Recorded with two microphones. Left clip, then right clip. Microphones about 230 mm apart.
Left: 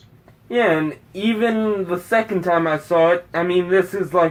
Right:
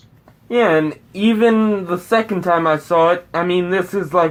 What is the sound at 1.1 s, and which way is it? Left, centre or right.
Speech, right.